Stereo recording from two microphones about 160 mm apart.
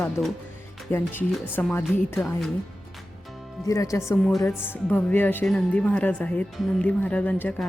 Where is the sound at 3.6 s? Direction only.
20° left (ahead or behind).